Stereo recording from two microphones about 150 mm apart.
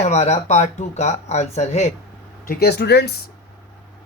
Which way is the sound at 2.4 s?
85° left.